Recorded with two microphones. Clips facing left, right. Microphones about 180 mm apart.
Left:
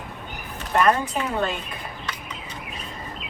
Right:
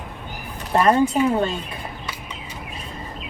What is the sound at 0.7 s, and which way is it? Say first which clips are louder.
Speech: right 2 dB; 30° right (ahead or behind).